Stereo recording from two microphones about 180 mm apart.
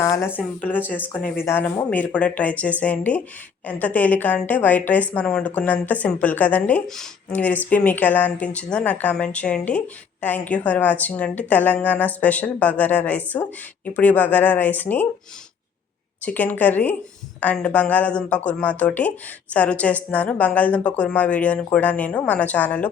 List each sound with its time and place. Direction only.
0.0 s a woman's voice: 15° left (ahead or behind)
16.2 s a woman's voice: 10° left (ahead or behind)